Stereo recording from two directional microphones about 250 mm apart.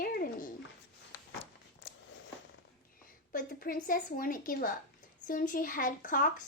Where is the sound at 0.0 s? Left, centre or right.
Left.